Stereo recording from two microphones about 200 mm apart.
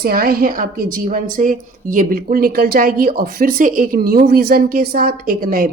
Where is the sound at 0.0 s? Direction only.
50° right (ahead or behind).